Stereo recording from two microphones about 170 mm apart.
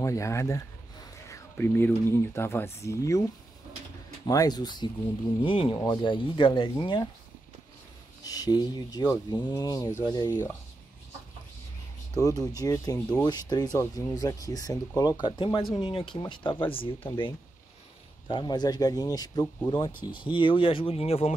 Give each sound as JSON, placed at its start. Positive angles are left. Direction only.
{"t": 0.0, "sound": "speech", "side_deg": 15}
{"t": 1.3, "sound": "a sound", "side_deg": 15}
{"t": 2.3, "sound": "speech", "side_deg": 15}
{"t": 4.3, "sound": "speech", "side_deg": 20}
{"t": 8.2, "sound": "speech", "side_deg": 20}
{"t": 12.1, "sound": "speech", "side_deg": 20}
{"t": 18.3, "sound": "speech", "side_deg": 25}